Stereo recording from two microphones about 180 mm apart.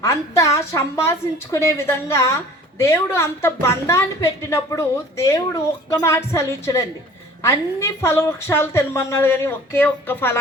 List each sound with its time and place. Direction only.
0.0 s a woman's voice: 15° left (ahead or behind)